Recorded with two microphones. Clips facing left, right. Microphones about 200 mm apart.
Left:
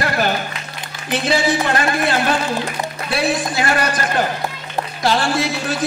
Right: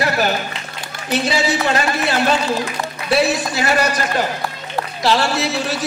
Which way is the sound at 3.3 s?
50° left (ahead or behind).